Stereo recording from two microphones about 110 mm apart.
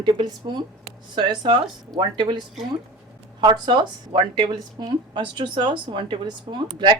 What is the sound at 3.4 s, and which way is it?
A woman's voice, 45° right (ahead or behind).